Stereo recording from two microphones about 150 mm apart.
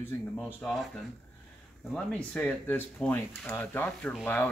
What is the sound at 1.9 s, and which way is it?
Speech, 5° left (ahead or behind).